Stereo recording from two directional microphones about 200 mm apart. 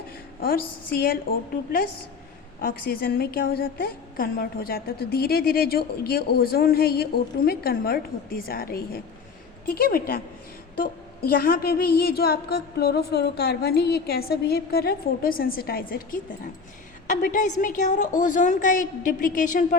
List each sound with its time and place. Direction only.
0.9 s a woman's voice: 50° left (ahead or behind)